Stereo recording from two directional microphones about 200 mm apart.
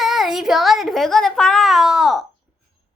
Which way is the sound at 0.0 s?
Centre (ahead or behind).